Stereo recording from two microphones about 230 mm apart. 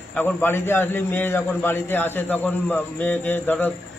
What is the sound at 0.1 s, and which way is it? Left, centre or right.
A man's voice, centre.